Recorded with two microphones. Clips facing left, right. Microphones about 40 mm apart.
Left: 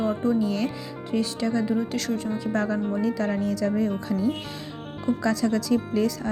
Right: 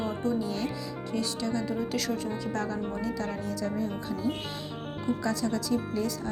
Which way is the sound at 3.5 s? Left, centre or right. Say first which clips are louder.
Left 7 dB; left.